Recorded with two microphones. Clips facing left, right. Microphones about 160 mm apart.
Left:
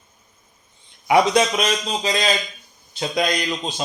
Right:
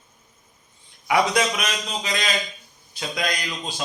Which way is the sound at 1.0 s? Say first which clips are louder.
Left 4 dB; 25° left (ahead or behind).